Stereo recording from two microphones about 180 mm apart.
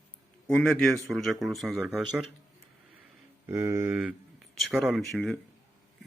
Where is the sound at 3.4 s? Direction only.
15° right (ahead or behind); by 5.4 s centre (ahead or behind).